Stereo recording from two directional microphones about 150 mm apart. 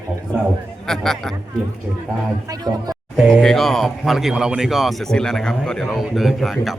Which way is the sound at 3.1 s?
Centre (ahead or behind).